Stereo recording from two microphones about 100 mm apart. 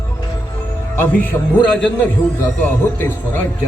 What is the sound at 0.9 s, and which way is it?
Speech, 15° left (ahead or behind).